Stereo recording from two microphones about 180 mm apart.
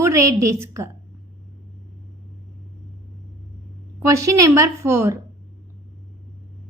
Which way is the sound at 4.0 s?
15° right (ahead or behind).